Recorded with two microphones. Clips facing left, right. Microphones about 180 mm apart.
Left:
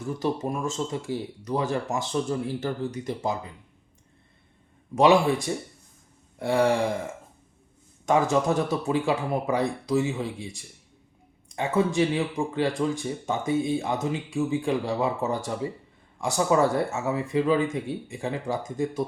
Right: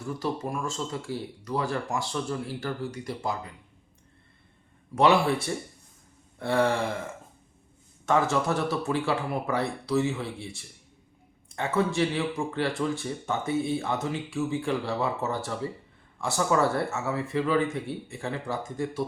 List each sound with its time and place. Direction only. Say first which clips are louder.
0.1 s speech: left 3 dB; 20° left (ahead or behind)
4.9 s speech: left 3 dB; 15° left (ahead or behind)
8.0 s speech: left 3 dB; 15° left (ahead or behind)